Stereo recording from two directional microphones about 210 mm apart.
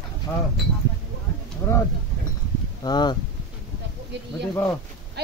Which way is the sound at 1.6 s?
10° left (ahead or behind).